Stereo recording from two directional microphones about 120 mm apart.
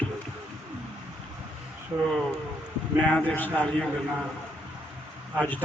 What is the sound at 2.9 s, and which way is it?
Speech, 10° left (ahead or behind).